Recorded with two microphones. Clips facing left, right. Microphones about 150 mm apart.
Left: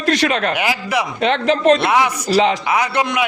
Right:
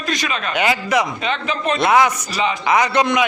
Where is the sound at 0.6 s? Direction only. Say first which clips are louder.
Right 2 dB; 5° left (ahead or behind).